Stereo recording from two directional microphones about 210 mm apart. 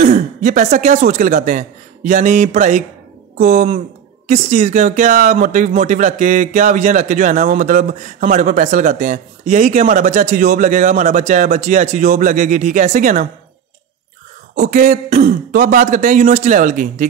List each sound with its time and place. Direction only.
0.1 s speech: 35° right (ahead or behind)
14.5 s speech: 35° right (ahead or behind)